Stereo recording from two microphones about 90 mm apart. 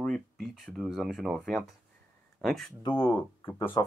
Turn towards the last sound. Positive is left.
turn(degrees=50)  # may be behind; listen again after turning